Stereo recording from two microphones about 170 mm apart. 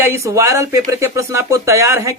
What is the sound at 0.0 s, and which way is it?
Speech, 15° right (ahead or behind).